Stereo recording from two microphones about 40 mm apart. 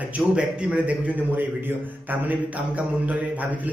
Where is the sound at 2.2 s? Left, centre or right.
Right.